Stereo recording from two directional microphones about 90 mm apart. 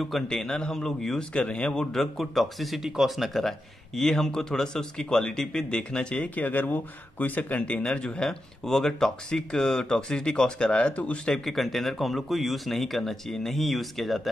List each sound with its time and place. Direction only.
0.0 s a man's voice: 5° left (ahead or behind)